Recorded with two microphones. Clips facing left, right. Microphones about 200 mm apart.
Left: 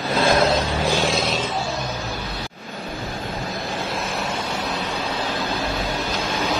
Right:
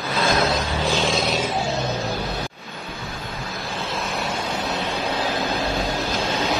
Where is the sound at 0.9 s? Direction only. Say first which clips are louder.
Right 1 dB; 5° left (ahead or behind).